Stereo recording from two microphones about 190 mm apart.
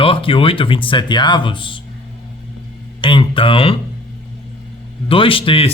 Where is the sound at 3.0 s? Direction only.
25° left (ahead or behind).